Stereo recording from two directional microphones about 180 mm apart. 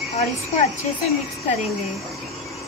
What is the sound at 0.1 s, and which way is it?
Speech, 40° left (ahead or behind).